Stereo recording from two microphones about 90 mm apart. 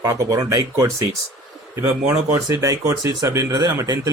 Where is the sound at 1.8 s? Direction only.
25° right (ahead or behind).